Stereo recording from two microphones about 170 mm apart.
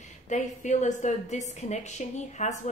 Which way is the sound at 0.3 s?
45° left (ahead or behind).